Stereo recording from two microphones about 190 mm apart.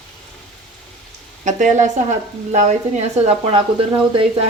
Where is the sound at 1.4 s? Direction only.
40° right (ahead or behind).